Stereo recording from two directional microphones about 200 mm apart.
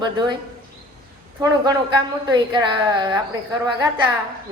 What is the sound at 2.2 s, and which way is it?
A woman's voice, 20° right (ahead or behind).